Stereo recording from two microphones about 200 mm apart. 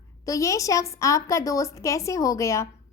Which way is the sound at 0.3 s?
15° left (ahead or behind).